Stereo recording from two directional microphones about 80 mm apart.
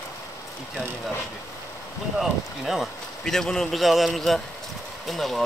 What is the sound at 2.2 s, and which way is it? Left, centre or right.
Speech, centre.